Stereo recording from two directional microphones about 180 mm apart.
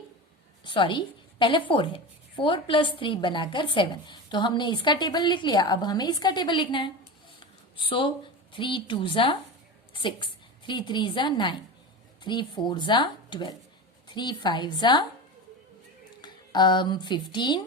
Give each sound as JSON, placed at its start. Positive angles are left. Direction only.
{"t": 0.6, "sound": "a woman's voice", "side_deg": 25}
{"t": 16.2, "sound": "speech", "side_deg": 25}